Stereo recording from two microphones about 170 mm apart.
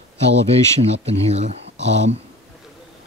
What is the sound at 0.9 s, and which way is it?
Speech, 40° right (ahead or behind).